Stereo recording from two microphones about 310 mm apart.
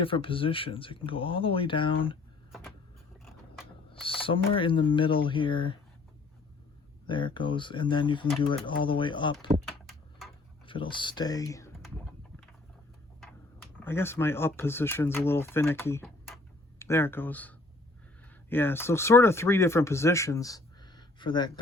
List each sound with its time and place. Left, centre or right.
0.0 s speech: centre
4.0 s speech: centre
7.1 s speech: centre
9.6 s a sound: centre
10.7 s speech: centre
13.1 s speech: centre